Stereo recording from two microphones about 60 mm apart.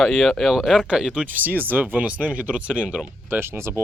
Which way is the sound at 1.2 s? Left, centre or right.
Right.